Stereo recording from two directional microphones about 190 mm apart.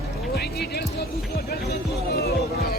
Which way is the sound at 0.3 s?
60° left (ahead or behind).